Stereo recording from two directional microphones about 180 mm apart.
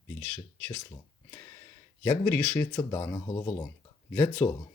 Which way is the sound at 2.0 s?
10° left (ahead or behind).